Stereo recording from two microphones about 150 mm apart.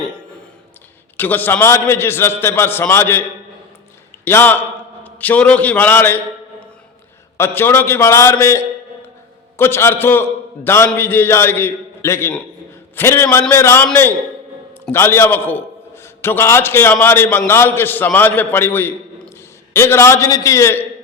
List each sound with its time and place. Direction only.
1.1 s a man's voice: 15° left (ahead or behind)
4.3 s a man's voice: 15° left (ahead or behind)
7.3 s a man's voice: 15° left (ahead or behind)